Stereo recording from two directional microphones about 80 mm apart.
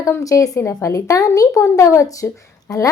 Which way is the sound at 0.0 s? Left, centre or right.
Left.